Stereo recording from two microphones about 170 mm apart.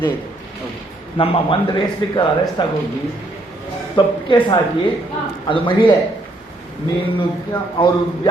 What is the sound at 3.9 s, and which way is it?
A man's voice, 25° left (ahead or behind).